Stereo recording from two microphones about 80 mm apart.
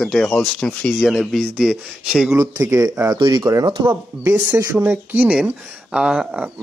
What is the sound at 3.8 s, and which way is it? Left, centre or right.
Speech, right.